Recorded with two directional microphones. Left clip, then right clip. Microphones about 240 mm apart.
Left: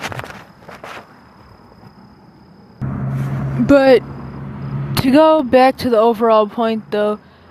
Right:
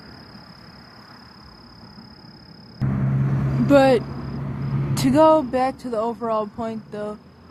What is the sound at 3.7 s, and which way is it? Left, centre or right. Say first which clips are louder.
Speech: left 5 dB; left.